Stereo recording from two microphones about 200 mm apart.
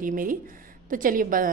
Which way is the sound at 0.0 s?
45° right (ahead or behind).